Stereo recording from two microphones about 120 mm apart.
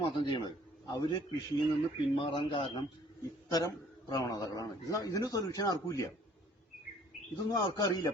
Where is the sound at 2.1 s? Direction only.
45° left (ahead or behind).